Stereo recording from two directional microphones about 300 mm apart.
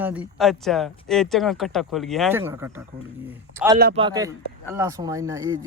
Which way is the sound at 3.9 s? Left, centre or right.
Centre.